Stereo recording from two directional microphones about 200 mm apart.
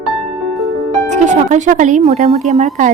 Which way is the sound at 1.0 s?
35° right (ahead or behind).